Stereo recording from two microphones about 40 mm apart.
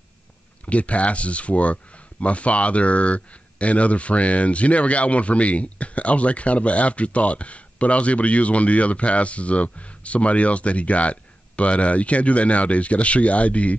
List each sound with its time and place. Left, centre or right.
0.7 s speech: left